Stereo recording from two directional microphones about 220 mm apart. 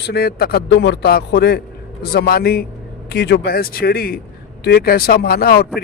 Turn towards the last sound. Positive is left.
turn(degrees=45)  # may be behind; listen again after turning